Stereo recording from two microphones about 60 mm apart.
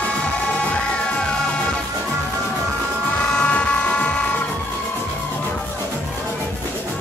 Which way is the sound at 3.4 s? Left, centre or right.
Centre.